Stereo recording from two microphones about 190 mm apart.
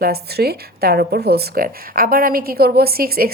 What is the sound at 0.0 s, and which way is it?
Speech, 55° right (ahead or behind).